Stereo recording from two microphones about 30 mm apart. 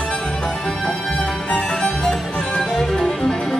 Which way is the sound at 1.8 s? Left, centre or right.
Left.